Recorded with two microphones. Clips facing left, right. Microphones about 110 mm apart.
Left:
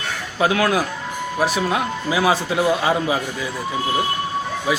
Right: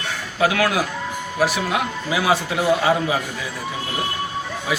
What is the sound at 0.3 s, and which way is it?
Speech, 25° left (ahead or behind).